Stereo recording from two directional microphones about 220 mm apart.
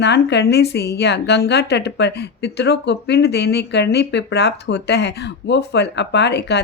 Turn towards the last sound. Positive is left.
turn(degrees=50)  # may be behind; listen again after turning